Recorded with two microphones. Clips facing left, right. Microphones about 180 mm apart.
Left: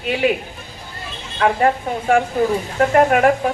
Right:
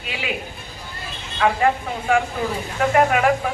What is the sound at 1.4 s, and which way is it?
Speech, 45° left (ahead or behind).